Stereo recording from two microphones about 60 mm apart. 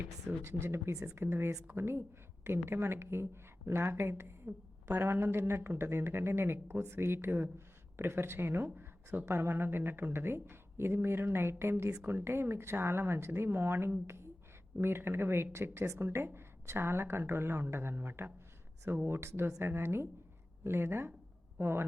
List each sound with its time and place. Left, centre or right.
0.4 s a woman's voice: right
9.2 s a woman's voice: right